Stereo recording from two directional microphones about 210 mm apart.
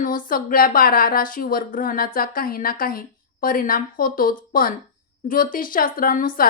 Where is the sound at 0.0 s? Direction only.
40° left (ahead or behind).